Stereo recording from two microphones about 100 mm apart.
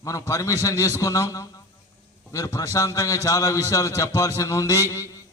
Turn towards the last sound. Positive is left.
turn(degrees=30)  # may be behind; listen again after turning